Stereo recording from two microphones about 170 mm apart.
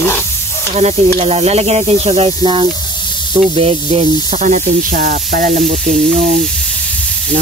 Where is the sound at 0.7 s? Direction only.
40° right (ahead or behind); by 5.6 s 55° right (ahead or behind).